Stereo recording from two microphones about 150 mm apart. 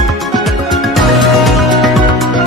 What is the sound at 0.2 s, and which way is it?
Music, centre (ahead or behind).